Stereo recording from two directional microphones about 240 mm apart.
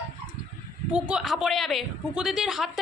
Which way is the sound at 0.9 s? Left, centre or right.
Centre.